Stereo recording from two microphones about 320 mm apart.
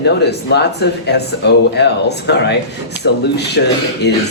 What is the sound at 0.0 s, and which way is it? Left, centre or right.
Speech, left.